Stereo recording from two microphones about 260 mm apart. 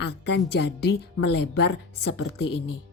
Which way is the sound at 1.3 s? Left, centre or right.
Left.